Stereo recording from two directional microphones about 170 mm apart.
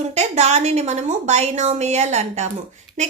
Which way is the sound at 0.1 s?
40° right (ahead or behind).